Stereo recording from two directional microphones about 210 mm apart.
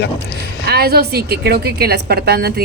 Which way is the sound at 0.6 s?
50° right (ahead or behind).